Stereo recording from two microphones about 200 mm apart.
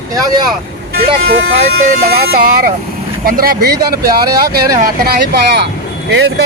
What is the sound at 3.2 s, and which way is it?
Speech, 45° right (ahead or behind).